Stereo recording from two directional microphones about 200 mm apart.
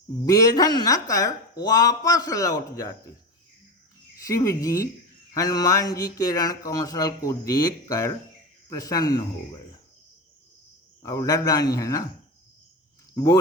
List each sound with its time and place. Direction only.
0.2 s speech: 20° left (ahead or behind)
4.2 s speech: 15° left (ahead or behind)
11.0 s speech: 15° left (ahead or behind)